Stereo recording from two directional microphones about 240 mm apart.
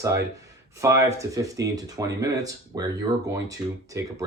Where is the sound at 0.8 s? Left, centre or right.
Centre.